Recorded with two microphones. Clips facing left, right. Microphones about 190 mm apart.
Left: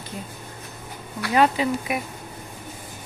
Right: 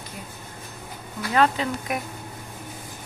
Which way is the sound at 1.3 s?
10° left (ahead or behind).